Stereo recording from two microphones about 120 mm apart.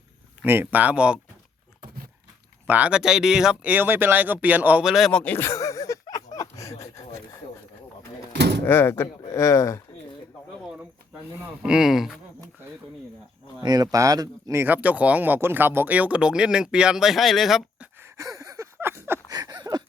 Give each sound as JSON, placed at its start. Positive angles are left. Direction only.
{"t": 0.4, "sound": "speech", "side_deg": -20}
{"t": 2.6, "sound": "speech", "side_deg": -10}
{"t": 5.1, "sound": "a sound", "side_deg": 15}
{"t": 8.6, "sound": "speech", "side_deg": 20}
{"t": 11.4, "sound": "speech", "side_deg": -5}
{"t": 13.6, "sound": "speech", "side_deg": -35}
{"t": 14.6, "sound": "speech", "side_deg": -15}
{"t": 18.0, "sound": "a sound", "side_deg": -30}
{"t": 19.3, "sound": "a sound", "side_deg": -35}